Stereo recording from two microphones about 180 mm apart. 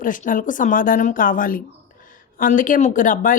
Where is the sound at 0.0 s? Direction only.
45° left (ahead or behind).